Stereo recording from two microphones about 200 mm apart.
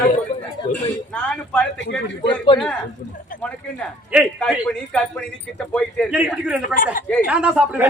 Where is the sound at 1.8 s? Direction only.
65° left (ahead or behind).